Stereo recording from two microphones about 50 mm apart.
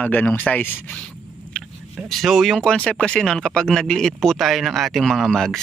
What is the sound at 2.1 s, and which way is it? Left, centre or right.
Speech, centre.